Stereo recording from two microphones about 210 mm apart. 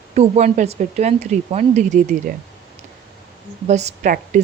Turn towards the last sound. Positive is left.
turn(degrees=-40)  # may be behind; listen again after turning